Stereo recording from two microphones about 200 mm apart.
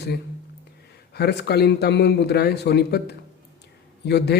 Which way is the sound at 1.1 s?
55° left (ahead or behind).